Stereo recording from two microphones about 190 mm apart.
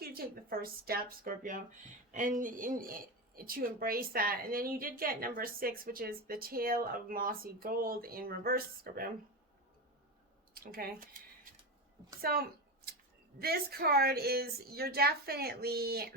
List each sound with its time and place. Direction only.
0.0 s a woman's voice: 50° right (ahead or behind)
10.5 s speech: 50° right (ahead or behind)
12.2 s a sound: 55° right (ahead or behind)
13.4 s a woman's voice: 55° right (ahead or behind)